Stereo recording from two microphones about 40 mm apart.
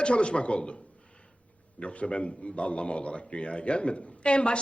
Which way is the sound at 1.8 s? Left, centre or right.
Left.